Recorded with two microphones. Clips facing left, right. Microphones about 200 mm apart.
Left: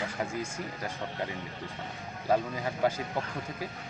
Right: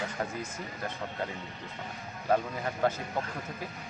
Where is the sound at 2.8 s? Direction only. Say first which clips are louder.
Even; 10° left (ahead or behind).